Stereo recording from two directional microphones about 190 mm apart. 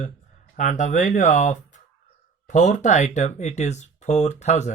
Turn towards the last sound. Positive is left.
turn(degrees=35)  # may be behind; listen again after turning